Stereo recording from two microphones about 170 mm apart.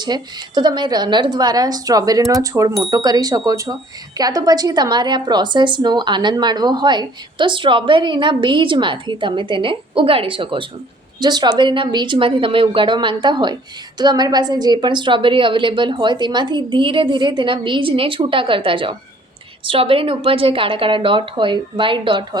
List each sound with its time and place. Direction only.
0.0 s a woman's voice: 25° right (ahead or behind)